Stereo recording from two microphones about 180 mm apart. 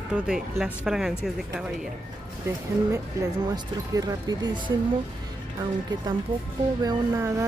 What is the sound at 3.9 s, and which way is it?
Speech, 20° right (ahead or behind).